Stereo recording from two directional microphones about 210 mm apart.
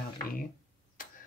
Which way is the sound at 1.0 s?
40° left (ahead or behind).